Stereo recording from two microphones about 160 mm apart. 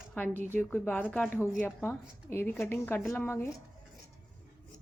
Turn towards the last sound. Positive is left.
turn(degrees=15)  # may be behind; listen again after turning